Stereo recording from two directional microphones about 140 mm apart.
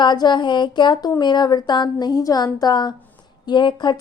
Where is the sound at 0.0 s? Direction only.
30° left (ahead or behind).